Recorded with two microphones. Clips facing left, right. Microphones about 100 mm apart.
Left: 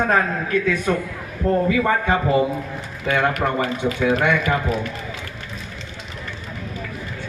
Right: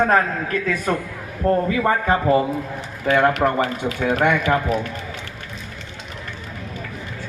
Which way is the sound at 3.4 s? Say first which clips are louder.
Right 3 dB; 25° right (ahead or behind).